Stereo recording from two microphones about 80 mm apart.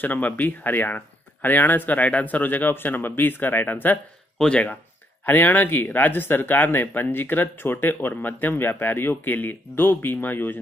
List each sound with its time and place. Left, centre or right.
0.0 s speech: left